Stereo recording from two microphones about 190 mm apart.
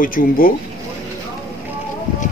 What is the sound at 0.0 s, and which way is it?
Speech, 45° left (ahead or behind).